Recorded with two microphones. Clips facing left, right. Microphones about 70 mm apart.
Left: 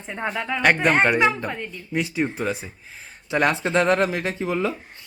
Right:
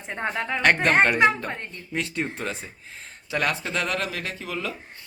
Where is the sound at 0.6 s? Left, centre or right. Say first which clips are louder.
Left 1 dB; centre.